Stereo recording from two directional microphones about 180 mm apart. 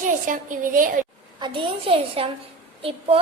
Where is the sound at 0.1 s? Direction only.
50° right (ahead or behind).